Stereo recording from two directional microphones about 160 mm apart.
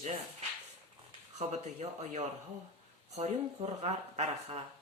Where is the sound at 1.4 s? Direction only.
45° right (ahead or behind).